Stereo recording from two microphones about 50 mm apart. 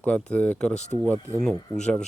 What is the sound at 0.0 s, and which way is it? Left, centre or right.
Speech, left.